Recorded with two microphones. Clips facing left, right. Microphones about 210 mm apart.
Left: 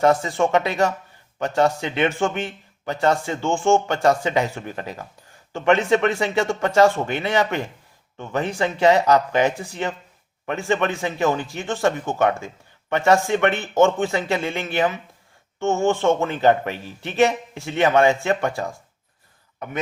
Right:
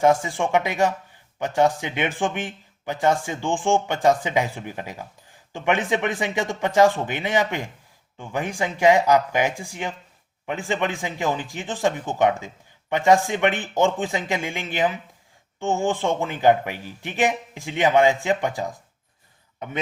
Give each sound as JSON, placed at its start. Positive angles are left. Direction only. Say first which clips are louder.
{"t": 0.0, "sound": "a man's voice", "louder": "left 1 dB", "side_deg": -15}